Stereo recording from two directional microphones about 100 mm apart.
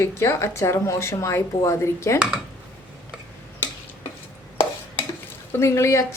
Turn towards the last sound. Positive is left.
turn(degrees=30)  # may be behind; listen again after turning